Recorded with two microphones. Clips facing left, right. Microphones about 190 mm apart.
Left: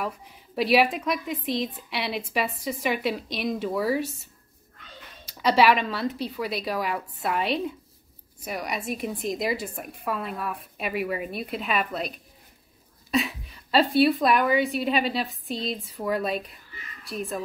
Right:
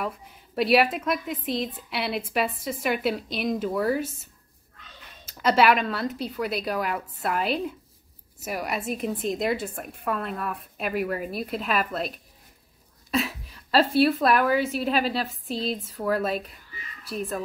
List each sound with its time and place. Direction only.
0.6 s a woman's voice: centre (ahead or behind)
5.4 s a woman's voice: centre (ahead or behind)
13.1 s a woman's voice: centre (ahead or behind)